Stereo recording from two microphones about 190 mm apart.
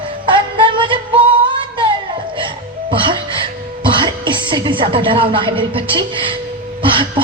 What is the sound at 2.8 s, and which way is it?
A woman's voice, 25° right (ahead or behind).